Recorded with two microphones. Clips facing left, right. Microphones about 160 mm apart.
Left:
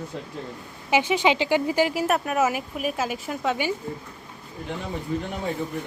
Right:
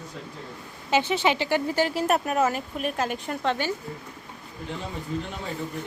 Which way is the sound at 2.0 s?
Centre (ahead or behind).